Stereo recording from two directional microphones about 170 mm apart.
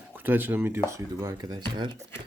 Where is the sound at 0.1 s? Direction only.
10° right (ahead or behind); by 2.0 s 30° right (ahead or behind).